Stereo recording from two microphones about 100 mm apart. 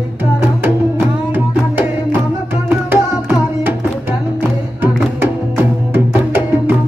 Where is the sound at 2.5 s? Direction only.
20° right (ahead or behind).